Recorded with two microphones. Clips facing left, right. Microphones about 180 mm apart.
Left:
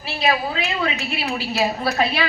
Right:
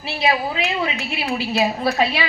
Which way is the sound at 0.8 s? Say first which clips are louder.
Even; 15° right (ahead or behind).